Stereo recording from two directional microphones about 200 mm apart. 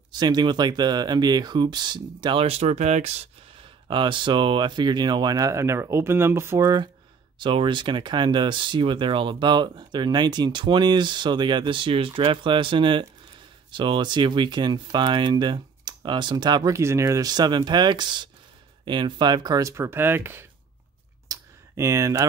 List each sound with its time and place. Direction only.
0.2 s speech: 20° right (ahead or behind)
21.3 s clicking: 15° right (ahead or behind)